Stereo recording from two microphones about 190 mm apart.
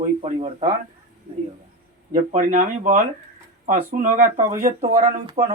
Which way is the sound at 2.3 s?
45° right (ahead or behind).